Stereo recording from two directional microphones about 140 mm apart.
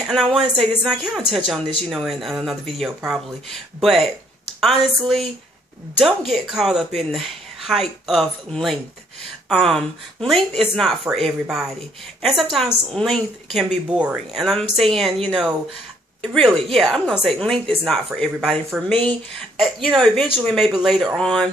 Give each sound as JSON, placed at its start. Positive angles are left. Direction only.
{"t": 0.1, "sound": "speech", "side_deg": 0}